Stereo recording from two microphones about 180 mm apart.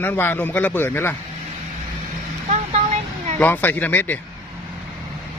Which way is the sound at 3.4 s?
10° left (ahead or behind).